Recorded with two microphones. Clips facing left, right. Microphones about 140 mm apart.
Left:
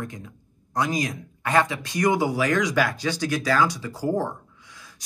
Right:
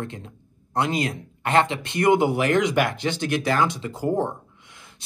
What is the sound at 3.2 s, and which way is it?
Speech, 25° right (ahead or behind).